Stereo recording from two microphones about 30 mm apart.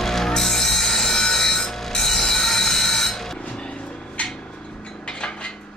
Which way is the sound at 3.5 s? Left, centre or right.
Left.